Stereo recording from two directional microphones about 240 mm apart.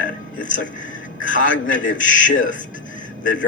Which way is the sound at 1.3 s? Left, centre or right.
Left.